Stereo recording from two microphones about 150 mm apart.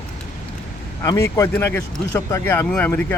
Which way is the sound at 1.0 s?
20° left (ahead or behind).